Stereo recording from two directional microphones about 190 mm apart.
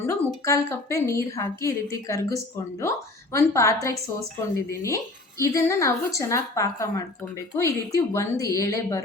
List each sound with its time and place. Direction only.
0.0 s speech: 15° left (ahead or behind)